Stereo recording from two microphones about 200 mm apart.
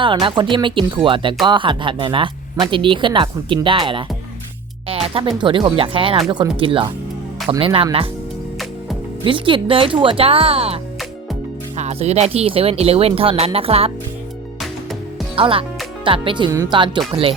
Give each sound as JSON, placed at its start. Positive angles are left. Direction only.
{"t": 0.0, "sound": "speech", "side_deg": -25}
{"t": 4.9, "sound": "music", "side_deg": -30}
{"t": 5.4, "sound": "speech", "side_deg": -25}
{"t": 9.2, "sound": "speech", "side_deg": -25}
{"t": 11.8, "sound": "speech", "side_deg": -30}
{"t": 15.4, "sound": "speech", "side_deg": -25}